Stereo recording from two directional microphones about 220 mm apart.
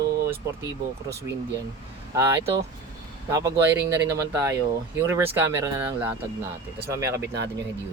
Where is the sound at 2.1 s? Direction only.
15° right (ahead or behind).